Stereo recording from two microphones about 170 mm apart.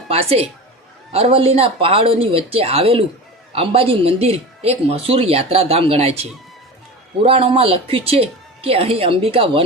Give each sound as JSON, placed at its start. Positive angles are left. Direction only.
{"t": 0.1, "sound": "speech", "side_deg": -35}
{"t": 7.2, "sound": "speech", "side_deg": -35}